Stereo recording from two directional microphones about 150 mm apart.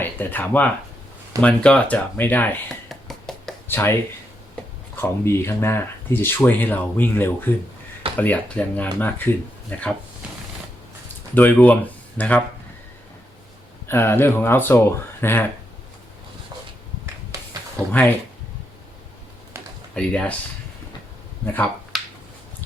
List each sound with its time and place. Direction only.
0.0 s speech: 15° left (ahead or behind)
2.9 s a sound: centre (ahead or behind)
3.7 s speech: 15° left (ahead or behind)
4.9 s speech: 15° left (ahead or behind)
11.3 s speech: 10° left (ahead or behind)
13.8 s speech: 15° left (ahead or behind)
17.3 s a sound: 20° right (ahead or behind)
20.0 s speech: 5° left (ahead or behind)
21.4 s speech: 10° left (ahead or behind)
21.9 s a sound: centre (ahead or behind)